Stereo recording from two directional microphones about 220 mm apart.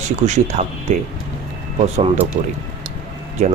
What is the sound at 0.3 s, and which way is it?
Speech, 30° right (ahead or behind).